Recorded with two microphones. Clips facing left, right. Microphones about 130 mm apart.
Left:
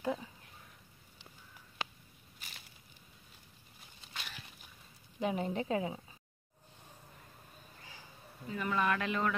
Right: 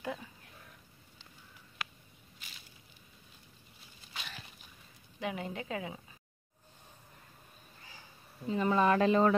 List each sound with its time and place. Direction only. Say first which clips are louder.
0.0 s speech: left 4 dB; 20° left (ahead or behind)
1.8 s a sound: left 2 dB; 25° left (ahead or behind)
5.2 s a woman's voice: left 4 dB; 35° left (ahead or behind)
8.5 s speech: right 6 dB; 30° right (ahead or behind)